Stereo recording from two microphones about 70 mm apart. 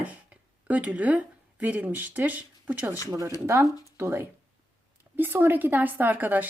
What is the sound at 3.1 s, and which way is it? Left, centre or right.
Speech, right.